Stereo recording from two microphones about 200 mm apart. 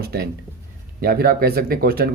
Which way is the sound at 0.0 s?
50° right (ahead or behind).